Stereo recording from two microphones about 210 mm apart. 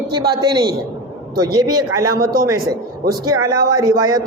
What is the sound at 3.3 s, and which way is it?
Speech, 90° right.